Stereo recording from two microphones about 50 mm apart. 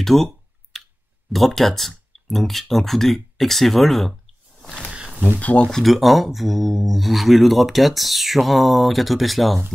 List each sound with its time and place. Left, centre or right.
0.0 s speech: centre
0.7 s clicking: centre
1.3 s speech: centre
4.9 s a sound: centre
5.4 s speech: left
5.9 s speech: centre